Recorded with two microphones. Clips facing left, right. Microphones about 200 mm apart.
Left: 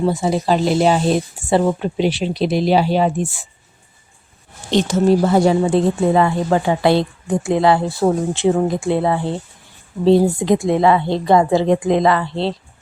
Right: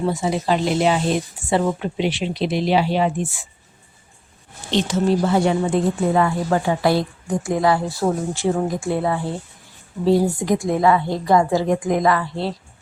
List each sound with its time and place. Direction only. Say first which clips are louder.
0.0 s speech: left 3 dB; 35° left (ahead or behind)
4.7 s speech: left 4 dB; 45° left (ahead or behind); by 12.5 s 25° left (ahead or behind)